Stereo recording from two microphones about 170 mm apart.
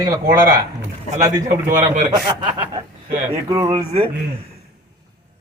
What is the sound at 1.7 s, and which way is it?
Speech, 50° right (ahead or behind).